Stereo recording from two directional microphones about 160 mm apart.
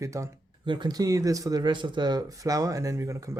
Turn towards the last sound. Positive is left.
turn(degrees=-20)  # may be behind; listen again after turning